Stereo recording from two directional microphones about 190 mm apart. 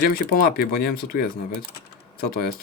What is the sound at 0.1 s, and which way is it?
Speech, 50° left (ahead or behind).